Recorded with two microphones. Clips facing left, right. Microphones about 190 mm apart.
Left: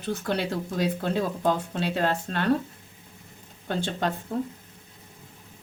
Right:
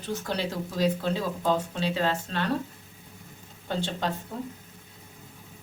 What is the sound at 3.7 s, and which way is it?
Speech, 55° left (ahead or behind).